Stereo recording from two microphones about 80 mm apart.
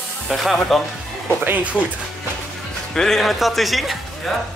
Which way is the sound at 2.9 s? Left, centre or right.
Centre.